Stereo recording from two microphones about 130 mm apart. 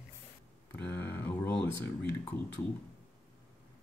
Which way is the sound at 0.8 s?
15° left (ahead or behind).